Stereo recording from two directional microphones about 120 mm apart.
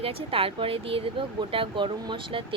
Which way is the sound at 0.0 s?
50° right (ahead or behind).